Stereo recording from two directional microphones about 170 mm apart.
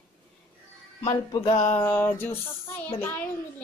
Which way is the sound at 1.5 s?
15° left (ahead or behind).